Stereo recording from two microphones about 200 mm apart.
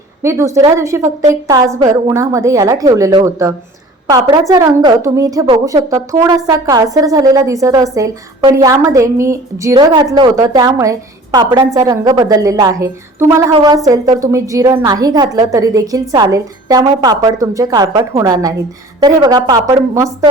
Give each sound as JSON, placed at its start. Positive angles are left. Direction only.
{"t": 0.2, "sound": "a woman's voice", "side_deg": -15}